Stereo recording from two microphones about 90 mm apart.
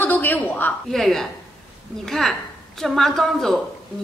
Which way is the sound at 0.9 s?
5° left (ahead or behind).